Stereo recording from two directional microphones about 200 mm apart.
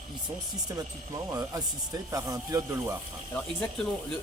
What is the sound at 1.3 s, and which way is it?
Speech, 20° right (ahead or behind).